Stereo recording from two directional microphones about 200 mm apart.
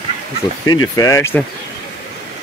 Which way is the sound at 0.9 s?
15° left (ahead or behind).